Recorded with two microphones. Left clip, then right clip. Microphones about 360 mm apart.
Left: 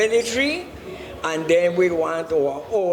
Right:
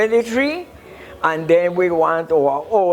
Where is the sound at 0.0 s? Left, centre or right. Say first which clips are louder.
Right 3 dB; right.